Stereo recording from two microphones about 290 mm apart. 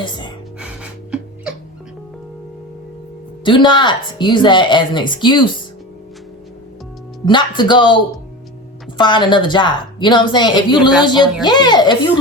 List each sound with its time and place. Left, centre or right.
0.0 s a woman's voice: centre
0.6 s music: centre
3.4 s a woman's voice: centre
7.3 s a woman's voice: centre
9.0 s a woman's voice: centre